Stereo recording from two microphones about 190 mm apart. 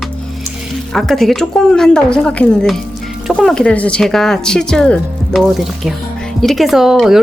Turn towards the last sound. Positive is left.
turn(degrees=0)  # may be behind; listen again after turning